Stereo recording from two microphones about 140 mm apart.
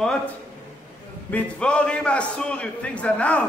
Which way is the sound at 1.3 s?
10° left (ahead or behind).